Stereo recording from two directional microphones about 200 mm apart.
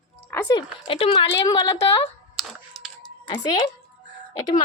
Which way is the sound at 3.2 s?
20° left (ahead or behind).